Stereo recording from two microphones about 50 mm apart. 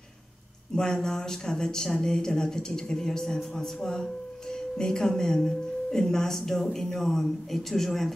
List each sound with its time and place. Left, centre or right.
0.7 s speech: centre